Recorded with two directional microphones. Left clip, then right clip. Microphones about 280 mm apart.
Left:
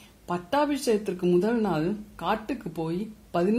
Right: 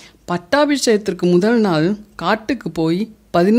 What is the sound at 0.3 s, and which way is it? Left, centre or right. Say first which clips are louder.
Speech: right 10 dB; right.